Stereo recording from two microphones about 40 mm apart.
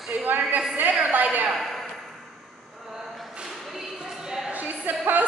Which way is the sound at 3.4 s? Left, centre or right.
Centre.